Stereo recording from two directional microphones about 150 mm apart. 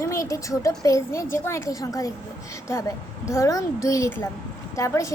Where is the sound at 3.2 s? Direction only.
20° left (ahead or behind).